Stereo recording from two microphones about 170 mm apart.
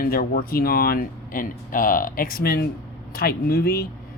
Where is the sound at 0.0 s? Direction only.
60° left (ahead or behind).